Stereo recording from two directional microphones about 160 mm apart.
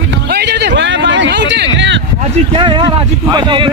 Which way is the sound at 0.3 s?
90° right.